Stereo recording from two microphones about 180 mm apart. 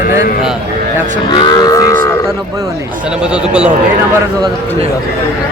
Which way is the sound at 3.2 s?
5° right (ahead or behind).